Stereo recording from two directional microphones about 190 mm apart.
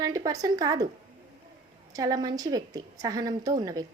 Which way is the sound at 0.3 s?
20° right (ahead or behind).